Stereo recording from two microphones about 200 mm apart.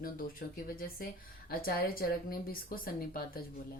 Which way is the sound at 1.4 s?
50° left (ahead or behind).